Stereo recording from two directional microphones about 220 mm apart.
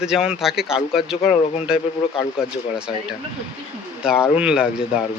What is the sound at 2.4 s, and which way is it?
Speech, 5° right (ahead or behind).